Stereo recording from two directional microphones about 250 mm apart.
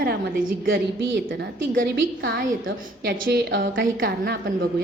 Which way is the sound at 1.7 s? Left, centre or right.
Right.